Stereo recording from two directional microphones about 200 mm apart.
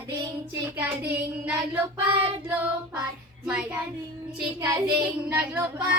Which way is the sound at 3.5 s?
5° right (ahead or behind).